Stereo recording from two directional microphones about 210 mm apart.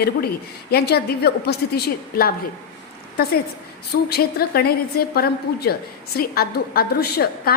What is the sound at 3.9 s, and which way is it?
A woman's voice, 50° left (ahead or behind).